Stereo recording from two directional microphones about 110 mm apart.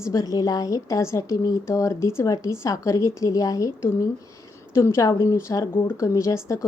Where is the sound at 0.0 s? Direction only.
30° left (ahead or behind).